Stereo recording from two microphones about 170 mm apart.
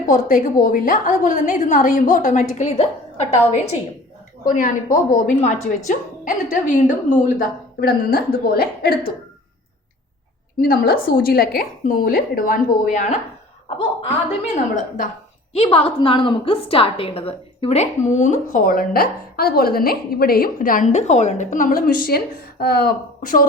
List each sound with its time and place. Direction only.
0.1 s a woman's voice: 50° left (ahead or behind)
4.4 s a woman's voice: 50° left (ahead or behind)
10.6 s a woman's voice: 60° left (ahead or behind)
14.4 s a woman's voice: 45° left (ahead or behind)
15.5 s a woman's voice: 30° left (ahead or behind); by 23.5 s 55° left (ahead or behind)